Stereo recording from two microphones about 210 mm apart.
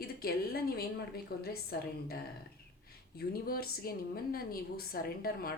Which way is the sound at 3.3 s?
45° left (ahead or behind).